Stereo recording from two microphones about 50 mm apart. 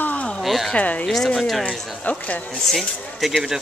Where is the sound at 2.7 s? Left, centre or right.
Centre.